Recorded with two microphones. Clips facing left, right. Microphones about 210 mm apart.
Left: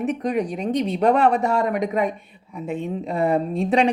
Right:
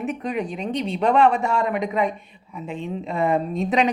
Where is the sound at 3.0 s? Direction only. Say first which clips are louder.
Left 1 dB; 35° left (ahead or behind).